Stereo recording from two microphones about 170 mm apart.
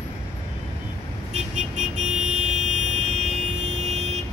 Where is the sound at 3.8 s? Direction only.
40° right (ahead or behind).